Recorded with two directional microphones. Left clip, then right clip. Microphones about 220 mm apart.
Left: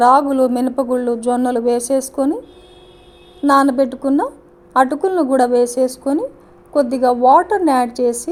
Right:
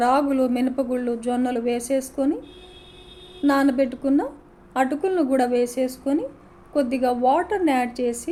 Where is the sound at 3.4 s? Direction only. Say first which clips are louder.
Left 7 dB; 20° left (ahead or behind).